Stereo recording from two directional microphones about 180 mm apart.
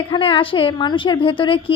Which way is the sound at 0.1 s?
30° left (ahead or behind).